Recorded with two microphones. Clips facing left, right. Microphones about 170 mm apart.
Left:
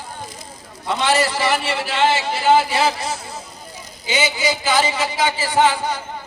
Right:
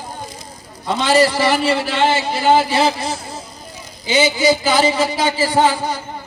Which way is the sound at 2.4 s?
35° right (ahead or behind).